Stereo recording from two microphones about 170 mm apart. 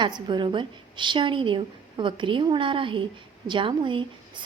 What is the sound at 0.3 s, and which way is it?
A woman's voice, 30° right (ahead or behind).